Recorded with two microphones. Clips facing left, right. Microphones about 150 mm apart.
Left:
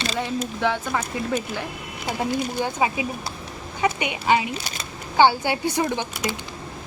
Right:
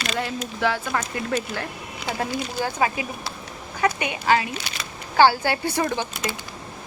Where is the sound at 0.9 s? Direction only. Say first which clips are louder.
Even; 10° left (ahead or behind).